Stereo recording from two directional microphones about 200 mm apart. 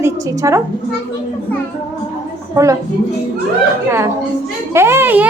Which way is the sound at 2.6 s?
15° right (ahead or behind).